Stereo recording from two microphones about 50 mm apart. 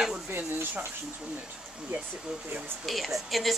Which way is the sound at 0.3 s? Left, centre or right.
Right.